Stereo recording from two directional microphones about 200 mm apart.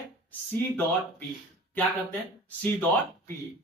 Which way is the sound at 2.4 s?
10° left (ahead or behind).